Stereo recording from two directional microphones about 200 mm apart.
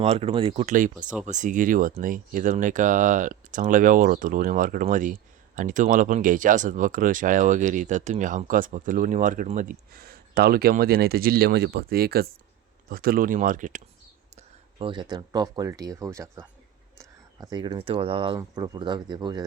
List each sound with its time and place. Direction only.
0.0 s speech: 30° right (ahead or behind)
14.3 s speech: 25° right (ahead or behind)